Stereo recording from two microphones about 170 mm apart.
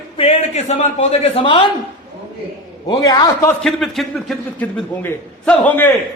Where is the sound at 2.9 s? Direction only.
25° left (ahead or behind).